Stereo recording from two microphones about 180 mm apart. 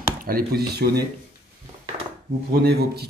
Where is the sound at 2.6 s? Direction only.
60° right (ahead or behind).